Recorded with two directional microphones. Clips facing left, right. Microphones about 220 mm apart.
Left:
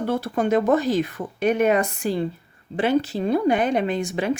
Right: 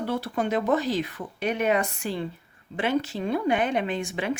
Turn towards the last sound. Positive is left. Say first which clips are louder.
# left 4 dB
turn(degrees=40)  # may be behind; listen again after turning